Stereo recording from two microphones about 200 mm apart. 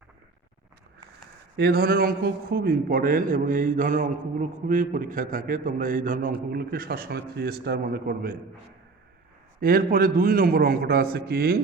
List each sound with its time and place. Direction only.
1.5 s a man's voice: 50° right (ahead or behind)
9.6 s a man's voice: 45° right (ahead or behind)